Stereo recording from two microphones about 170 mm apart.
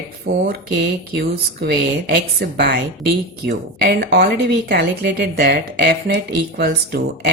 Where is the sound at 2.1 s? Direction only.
80° right.